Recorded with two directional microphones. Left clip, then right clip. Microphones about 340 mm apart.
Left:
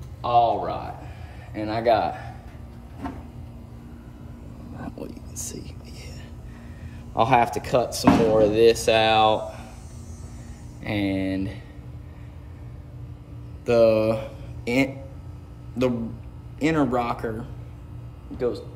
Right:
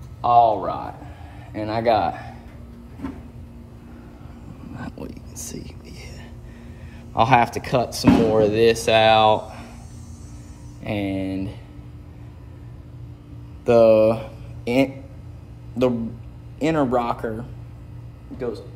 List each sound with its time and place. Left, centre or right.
0.2 s speech: centre
4.7 s vehicle: right
7.2 s speech: right
10.8 s speech: centre
13.7 s speech: centre
16.5 s speech: centre